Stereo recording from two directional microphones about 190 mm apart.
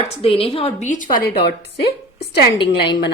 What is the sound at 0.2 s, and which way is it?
Speech, 30° left (ahead or behind).